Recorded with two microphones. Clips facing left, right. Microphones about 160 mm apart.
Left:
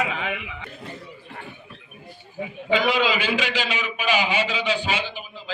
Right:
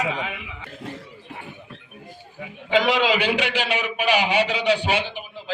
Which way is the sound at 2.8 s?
75° right (ahead or behind).